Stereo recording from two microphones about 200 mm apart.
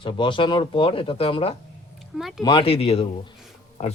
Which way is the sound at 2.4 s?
25° left (ahead or behind).